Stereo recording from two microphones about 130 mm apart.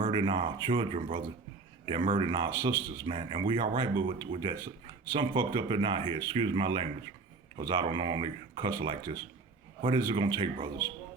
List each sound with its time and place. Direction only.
0.0 s speech: 35° right (ahead or behind)